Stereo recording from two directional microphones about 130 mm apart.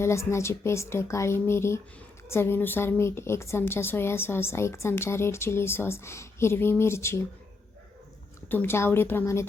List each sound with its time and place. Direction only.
0.0 s a woman's voice: 20° left (ahead or behind)
8.4 s a woman's voice: 15° left (ahead or behind)